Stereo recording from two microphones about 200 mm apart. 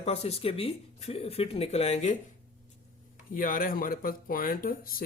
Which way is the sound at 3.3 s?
45° left (ahead or behind).